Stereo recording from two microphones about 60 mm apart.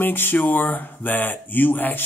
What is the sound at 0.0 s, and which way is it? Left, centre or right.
Speech, left.